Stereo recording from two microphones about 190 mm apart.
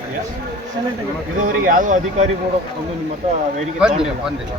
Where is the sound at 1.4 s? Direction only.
45° right (ahead or behind).